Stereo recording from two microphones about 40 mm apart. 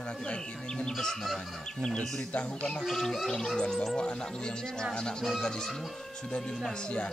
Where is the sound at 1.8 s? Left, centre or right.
Centre.